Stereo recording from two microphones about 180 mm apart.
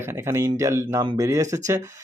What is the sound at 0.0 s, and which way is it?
Speech, 15° right (ahead or behind).